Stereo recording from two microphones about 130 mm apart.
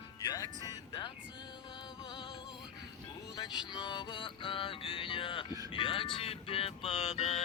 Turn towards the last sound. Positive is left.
turn(degrees=50)  # may be behind; listen again after turning